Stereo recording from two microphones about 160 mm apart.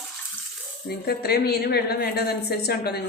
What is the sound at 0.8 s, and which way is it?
A woman's voice, 80° left.